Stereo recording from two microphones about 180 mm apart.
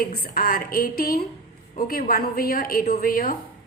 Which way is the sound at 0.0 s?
55° left (ahead or behind).